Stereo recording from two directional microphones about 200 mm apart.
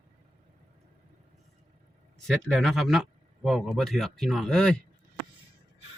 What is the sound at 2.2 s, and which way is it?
Speech, centre (ahead or behind).